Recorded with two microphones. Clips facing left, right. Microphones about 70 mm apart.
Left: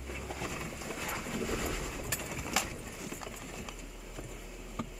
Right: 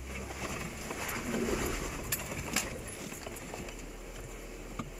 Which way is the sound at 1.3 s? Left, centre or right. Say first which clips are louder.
Right 4 dB; centre.